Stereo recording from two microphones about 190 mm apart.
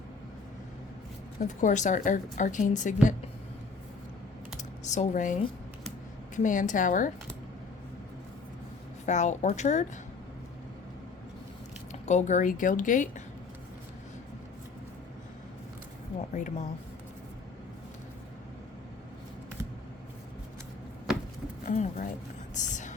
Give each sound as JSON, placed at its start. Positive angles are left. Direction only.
{"t": 1.4, "sound": "a woman's voice", "side_deg": 40}
{"t": 4.8, "sound": "a woman's voice", "side_deg": 40}
{"t": 9.0, "sound": "a woman's voice", "side_deg": 40}
{"t": 11.9, "sound": "a woman's voice", "side_deg": 40}
{"t": 16.3, "sound": "a woman's voice", "side_deg": 40}
{"t": 21.6, "sound": "a sound", "side_deg": 45}
{"t": 22.5, "sound": "whispering", "side_deg": 40}